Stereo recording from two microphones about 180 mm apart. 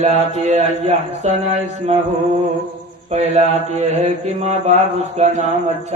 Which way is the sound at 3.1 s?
40° right (ahead or behind).